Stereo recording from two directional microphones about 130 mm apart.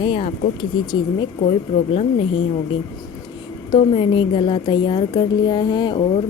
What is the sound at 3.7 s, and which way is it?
A woman's voice, 45° left (ahead or behind).